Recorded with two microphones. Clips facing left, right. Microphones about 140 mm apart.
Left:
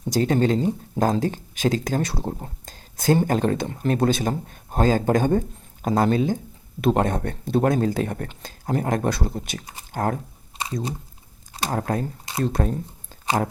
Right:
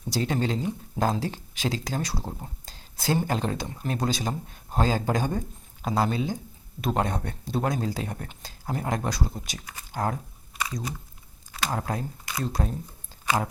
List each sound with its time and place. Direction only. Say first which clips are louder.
0.1 s a man's voice: left 7 dB; 50° left (ahead or behind)
2.4 s a sound: left 4 dB; 45° left (ahead or behind)
3.2 s a man's voice: left 6 dB; 50° left (ahead or behind)
10.5 s chewing: even; 25° left (ahead or behind)
11.5 s a man's voice: left 4 dB; 40° left (ahead or behind); by 12.8 s 55° left (ahead or behind)